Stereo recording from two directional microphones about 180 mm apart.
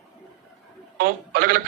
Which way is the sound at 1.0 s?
50° right (ahead or behind).